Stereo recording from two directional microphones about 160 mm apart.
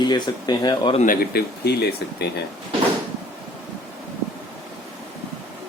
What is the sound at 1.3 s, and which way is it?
Speech, 90° left.